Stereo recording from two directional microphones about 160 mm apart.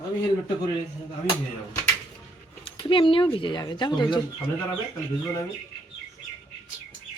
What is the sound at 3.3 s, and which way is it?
Speech, 30° left (ahead or behind).